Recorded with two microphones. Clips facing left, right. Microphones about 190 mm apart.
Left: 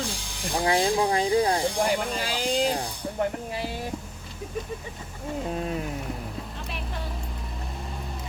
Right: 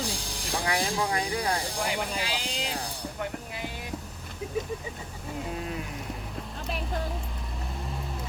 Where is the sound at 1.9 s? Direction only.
45° left (ahead or behind).